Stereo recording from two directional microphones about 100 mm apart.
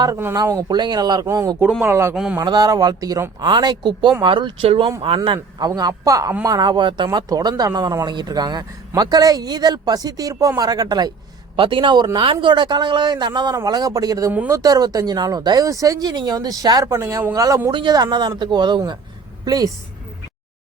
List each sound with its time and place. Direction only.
0.3 s speech: 40° right (ahead or behind)
2.4 s speech: 45° right (ahead or behind)
11.5 s a man's voice: 60° right (ahead or behind); by 17.6 s 35° right (ahead or behind)
17.7 s speech: 50° right (ahead or behind)